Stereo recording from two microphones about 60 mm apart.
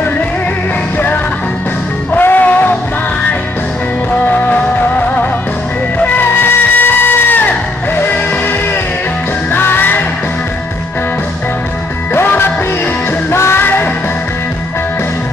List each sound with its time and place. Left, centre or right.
0.9 s music: left
4.1 s music: left
6.0 s music: left
12.1 s music: left